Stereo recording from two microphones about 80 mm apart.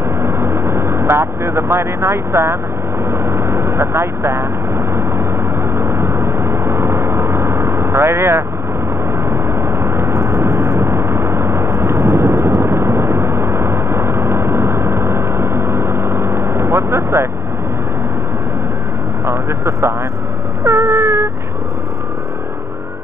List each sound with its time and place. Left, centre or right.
0.2 s vehicle: right
19.2 s vehicle: right
20.6 s a sound: right